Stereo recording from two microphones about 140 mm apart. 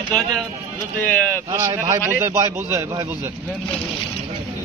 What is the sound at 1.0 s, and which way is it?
Speech, 10° left (ahead or behind).